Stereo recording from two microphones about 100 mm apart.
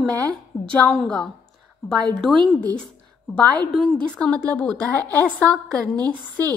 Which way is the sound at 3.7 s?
5° left (ahead or behind).